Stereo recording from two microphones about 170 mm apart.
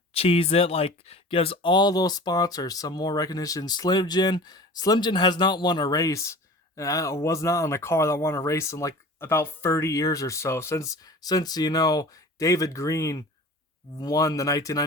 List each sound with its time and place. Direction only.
0.1 s speech: 35° left (ahead or behind); by 14.8 s 20° left (ahead or behind)